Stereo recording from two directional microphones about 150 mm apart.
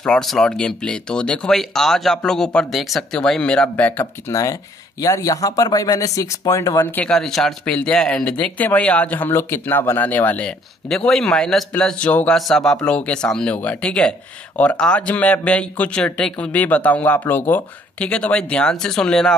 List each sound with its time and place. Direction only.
0.0 s speech: 5° left (ahead or behind)
7.1 s speech: 5° left (ahead or behind)